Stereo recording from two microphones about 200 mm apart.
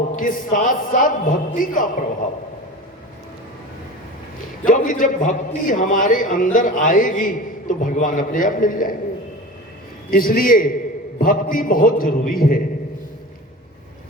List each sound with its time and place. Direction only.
0.2 s a man's voice: 40° left (ahead or behind)
4.6 s a man's voice: 40° left (ahead or behind)
10.1 s a man's voice: 45° left (ahead or behind)